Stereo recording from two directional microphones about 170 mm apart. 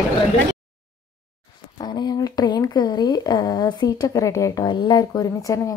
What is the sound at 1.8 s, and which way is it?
Speech, 25° left (ahead or behind).